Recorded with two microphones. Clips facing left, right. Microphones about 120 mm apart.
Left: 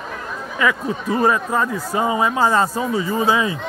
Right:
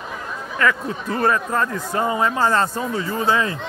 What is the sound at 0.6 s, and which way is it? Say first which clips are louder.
Speech: left 1 dB; 10° left (ahead or behind).